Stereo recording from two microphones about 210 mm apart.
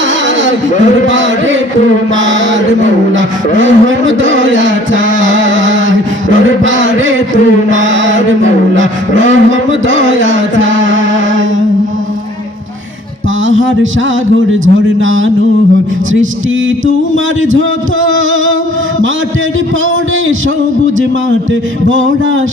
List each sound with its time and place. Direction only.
1.0 s a man's voice: 60° right (ahead or behind)
5.2 s a sound: 65° right (ahead or behind)
7.7 s a man's voice: 65° right (ahead or behind)
13.5 s music: 65° right (ahead or behind)
14.6 s a man's voice: 65° right (ahead or behind)
17.5 s a man's voice: 65° right (ahead or behind)
21.8 s a man's voice: 65° right (ahead or behind)